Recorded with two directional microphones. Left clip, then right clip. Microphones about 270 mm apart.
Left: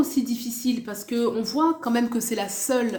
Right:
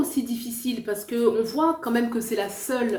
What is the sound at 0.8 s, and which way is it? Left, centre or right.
A woman's voice, left.